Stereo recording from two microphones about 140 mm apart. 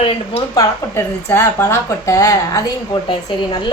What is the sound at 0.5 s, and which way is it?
Speech, 15° left (ahead or behind).